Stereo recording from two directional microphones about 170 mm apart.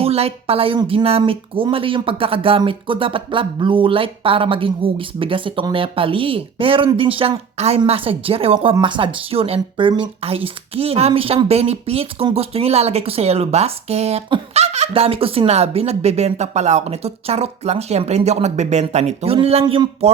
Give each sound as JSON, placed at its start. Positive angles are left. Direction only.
{"t": 0.0, "sound": "a woman's voice", "side_deg": -35}